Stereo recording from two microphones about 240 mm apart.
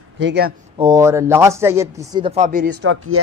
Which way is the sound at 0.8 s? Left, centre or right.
Centre.